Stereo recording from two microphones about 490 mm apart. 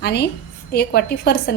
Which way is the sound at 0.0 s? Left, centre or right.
Centre.